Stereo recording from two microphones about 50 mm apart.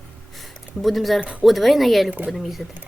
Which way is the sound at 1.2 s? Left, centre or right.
Right.